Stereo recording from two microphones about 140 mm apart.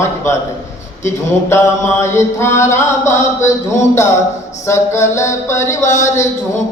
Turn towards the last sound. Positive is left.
turn(degrees=20)  # may be behind; listen again after turning